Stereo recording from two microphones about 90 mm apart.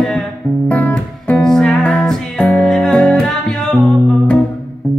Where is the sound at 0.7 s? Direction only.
15° left (ahead or behind).